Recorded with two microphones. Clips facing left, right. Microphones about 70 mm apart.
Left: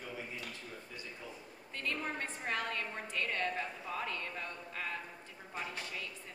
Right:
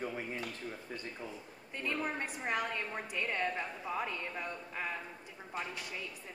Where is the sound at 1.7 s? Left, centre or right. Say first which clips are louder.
Right 2 dB; centre.